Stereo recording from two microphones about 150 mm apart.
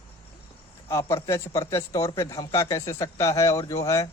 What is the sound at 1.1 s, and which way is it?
Speech, 20° left (ahead or behind).